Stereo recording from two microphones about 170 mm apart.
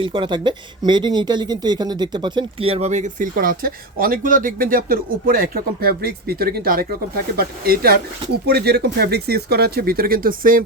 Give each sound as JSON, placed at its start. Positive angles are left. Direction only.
{"t": 0.0, "sound": "speech", "side_deg": -30}